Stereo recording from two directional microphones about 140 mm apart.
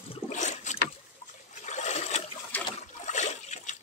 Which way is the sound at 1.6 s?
55° left (ahead or behind).